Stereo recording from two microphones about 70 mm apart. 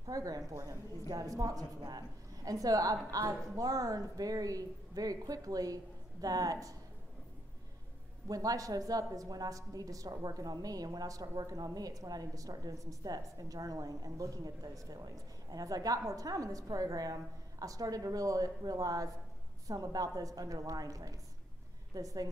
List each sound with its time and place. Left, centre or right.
0.0 s a woman's voice: right
8.3 s a woman's voice: right